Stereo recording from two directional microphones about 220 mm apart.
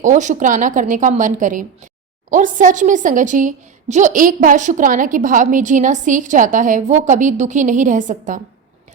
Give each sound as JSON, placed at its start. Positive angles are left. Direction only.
{"t": 0.0, "sound": "a woman's voice", "side_deg": -35}